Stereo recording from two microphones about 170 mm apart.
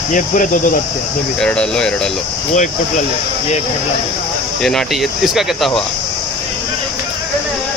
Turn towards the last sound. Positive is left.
turn(degrees=0)  # may be behind; listen again after turning